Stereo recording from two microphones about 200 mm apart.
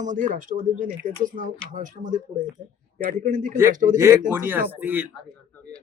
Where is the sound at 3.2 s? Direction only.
40° right (ahead or behind).